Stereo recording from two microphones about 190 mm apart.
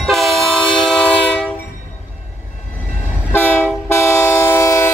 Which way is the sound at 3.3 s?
10° left (ahead or behind).